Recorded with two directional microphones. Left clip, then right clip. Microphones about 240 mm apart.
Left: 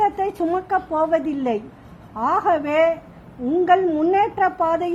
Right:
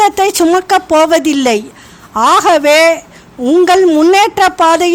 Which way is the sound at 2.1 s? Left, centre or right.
Right.